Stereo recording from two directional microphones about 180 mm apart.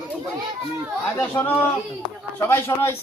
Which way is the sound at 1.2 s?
15° left (ahead or behind).